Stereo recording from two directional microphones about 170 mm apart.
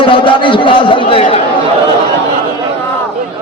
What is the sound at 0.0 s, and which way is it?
Chatter, 30° left (ahead or behind).